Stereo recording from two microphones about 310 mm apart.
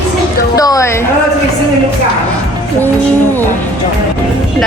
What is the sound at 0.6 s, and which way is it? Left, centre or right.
Speech, centre.